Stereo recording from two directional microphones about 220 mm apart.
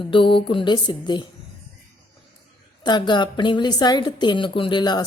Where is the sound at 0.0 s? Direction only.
25° left (ahead or behind).